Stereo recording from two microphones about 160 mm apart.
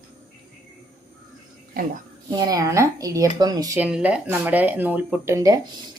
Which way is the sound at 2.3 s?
25° right (ahead or behind).